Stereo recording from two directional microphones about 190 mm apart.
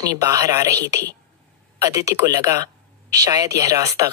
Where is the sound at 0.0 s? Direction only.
20° right (ahead or behind).